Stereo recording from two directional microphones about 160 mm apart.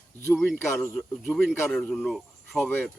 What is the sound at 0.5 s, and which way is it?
Speech, 10° left (ahead or behind).